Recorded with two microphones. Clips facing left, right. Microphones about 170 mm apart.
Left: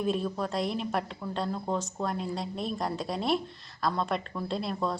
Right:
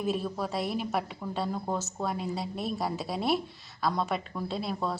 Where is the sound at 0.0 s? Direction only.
5° right (ahead or behind).